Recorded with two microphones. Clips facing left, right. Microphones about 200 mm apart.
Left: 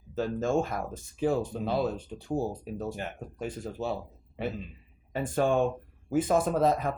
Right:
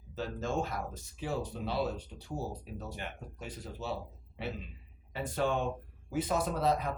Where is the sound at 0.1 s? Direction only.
50° left (ahead or behind).